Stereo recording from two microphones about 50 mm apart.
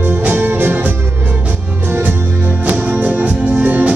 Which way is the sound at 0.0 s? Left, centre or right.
Right.